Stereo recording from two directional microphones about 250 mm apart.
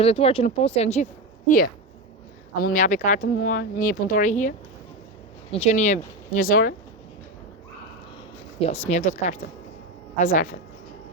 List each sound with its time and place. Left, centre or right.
0.0 s speech: left
2.6 s speech: left
8.6 s speech: left